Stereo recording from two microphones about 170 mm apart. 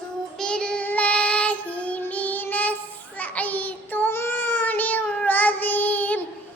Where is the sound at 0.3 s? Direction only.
5° left (ahead or behind).